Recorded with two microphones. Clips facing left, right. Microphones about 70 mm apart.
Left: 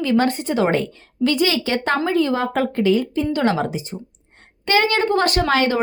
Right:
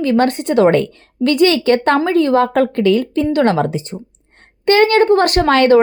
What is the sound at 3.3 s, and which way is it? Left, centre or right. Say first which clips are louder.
Speech: right 6 dB; right.